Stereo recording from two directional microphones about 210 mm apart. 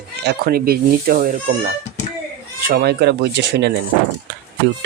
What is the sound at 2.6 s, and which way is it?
Speech, 50° right (ahead or behind).